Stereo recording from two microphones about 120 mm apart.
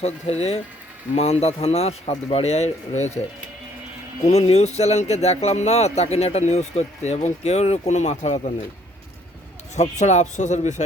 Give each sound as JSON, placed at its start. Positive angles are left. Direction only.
{"t": 0.0, "sound": "a man's voice", "side_deg": 60}
{"t": 4.3, "sound": "speech", "side_deg": 65}
{"t": 9.7, "sound": "speech", "side_deg": 75}